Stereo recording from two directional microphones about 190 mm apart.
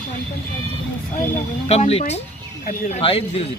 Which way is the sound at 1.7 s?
35° left (ahead or behind).